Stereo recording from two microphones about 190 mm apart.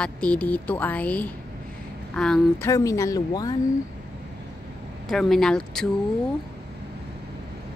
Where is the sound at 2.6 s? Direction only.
15° left (ahead or behind).